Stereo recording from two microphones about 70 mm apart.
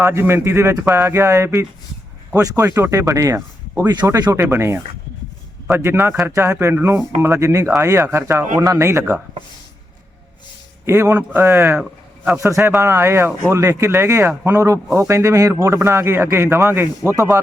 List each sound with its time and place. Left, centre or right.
0.0 s speech: right
2.3 s speech: right
2.6 s speech: right
4.4 s speech: right
10.8 s a man's voice: right
11.8 s a sound: centre
12.4 s speech: right
15.6 s speech: right
17.2 s speech: right